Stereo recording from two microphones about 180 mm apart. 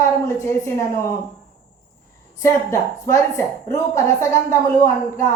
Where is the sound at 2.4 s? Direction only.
15° left (ahead or behind).